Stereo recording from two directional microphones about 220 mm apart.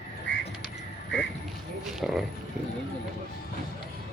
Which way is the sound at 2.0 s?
Centre (ahead or behind).